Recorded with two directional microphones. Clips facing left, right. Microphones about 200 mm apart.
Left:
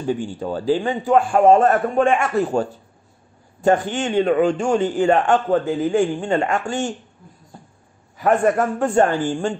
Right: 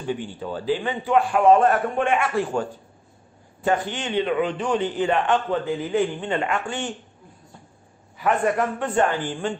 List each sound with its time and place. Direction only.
0.0 s a man's voice: 45° left (ahead or behind)
8.2 s a man's voice: 45° left (ahead or behind)